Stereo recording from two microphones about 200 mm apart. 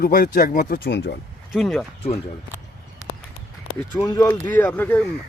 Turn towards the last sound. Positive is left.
turn(degrees=10)  # may be behind; listen again after turning